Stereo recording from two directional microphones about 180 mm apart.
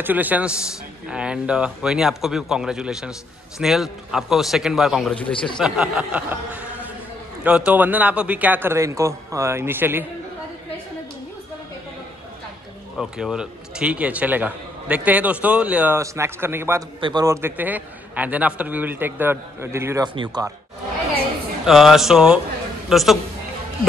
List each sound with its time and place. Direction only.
0.0 s a man's voice: 10° right (ahead or behind)
5.3 s speech: 30° left (ahead or behind)
5.6 s a man's voice: 5° right (ahead or behind)
12.9 s a man's voice: 5° right (ahead or behind)
21.6 s a man's voice: centre (ahead or behind)